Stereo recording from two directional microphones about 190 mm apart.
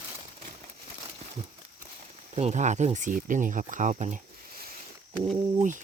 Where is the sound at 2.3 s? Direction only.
35° right (ahead or behind).